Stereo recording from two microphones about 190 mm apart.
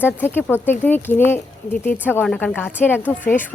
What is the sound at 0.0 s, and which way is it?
Speech, 10° left (ahead or behind).